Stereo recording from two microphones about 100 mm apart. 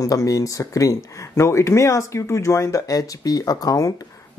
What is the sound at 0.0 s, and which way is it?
Speech, 35° left (ahead or behind).